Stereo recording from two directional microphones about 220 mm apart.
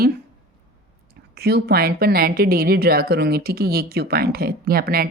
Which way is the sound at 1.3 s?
45° right (ahead or behind).